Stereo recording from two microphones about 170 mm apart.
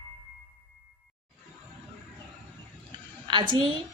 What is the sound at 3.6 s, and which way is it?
Speech, 30° right (ahead or behind).